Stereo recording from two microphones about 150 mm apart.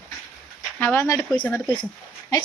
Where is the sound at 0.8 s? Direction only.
15° left (ahead or behind).